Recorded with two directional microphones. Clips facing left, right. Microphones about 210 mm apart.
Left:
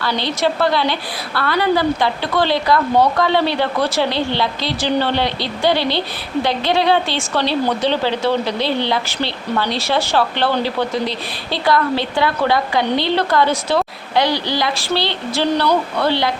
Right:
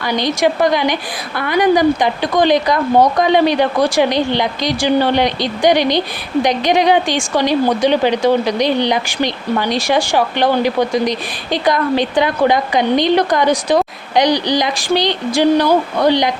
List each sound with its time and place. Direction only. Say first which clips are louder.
0.0 s a woman's voice: right 4 dB; 15° right (ahead or behind)